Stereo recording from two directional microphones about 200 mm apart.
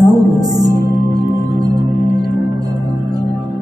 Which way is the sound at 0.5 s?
20° right (ahead or behind).